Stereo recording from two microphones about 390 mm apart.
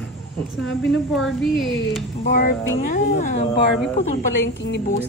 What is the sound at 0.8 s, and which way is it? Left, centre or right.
A woman's voice, centre.